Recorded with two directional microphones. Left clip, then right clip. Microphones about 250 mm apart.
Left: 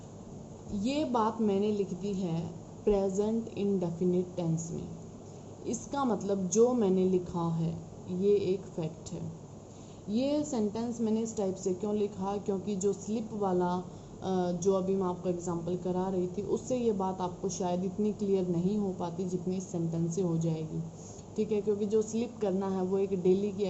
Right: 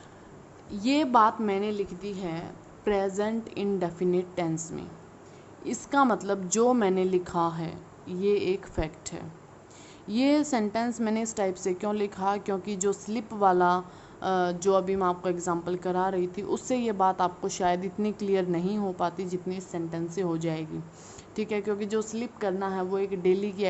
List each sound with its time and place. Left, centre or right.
0.8 s a woman's voice: right
5.6 s a woman's voice: right